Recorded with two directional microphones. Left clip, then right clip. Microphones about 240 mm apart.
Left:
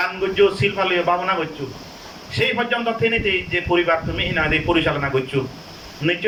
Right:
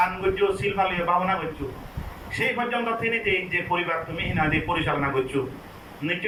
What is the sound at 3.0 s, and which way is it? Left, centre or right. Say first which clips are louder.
A man's voice: left 5 dB; left.